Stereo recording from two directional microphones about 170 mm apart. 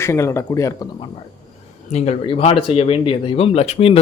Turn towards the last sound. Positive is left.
turn(degrees=35)  # may be behind; listen again after turning